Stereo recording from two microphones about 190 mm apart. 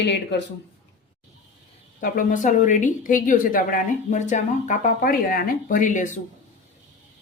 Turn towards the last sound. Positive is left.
turn(degrees=40)  # may be behind; listen again after turning